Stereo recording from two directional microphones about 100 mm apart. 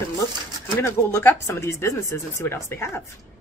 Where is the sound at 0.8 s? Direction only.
25° left (ahead or behind).